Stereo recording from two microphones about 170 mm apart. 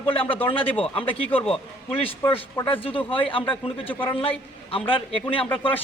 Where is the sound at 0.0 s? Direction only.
30° left (ahead or behind).